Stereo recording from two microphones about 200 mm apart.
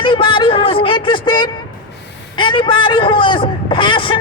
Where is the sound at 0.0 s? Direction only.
25° left (ahead or behind).